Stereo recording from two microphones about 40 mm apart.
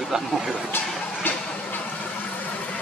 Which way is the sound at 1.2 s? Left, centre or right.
Left.